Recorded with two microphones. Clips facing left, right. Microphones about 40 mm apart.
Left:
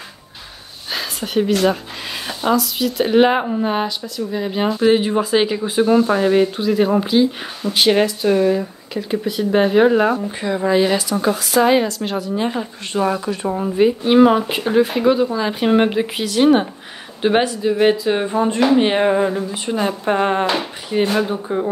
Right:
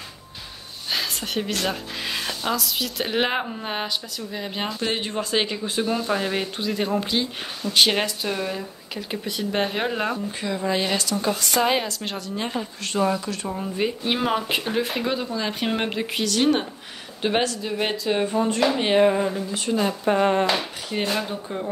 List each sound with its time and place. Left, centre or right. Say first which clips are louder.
0.8 s a woman's voice: left 2 dB; centre
13.7 s a woman's voice: left 13 dB; centre
18.2 s a woman's voice: left 2 dB; left